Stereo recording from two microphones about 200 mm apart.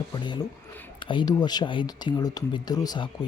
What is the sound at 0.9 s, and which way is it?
A man's voice, 25° left (ahead or behind).